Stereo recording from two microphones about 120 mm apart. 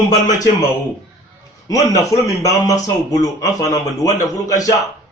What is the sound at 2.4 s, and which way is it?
Speech, 30° left (ahead or behind).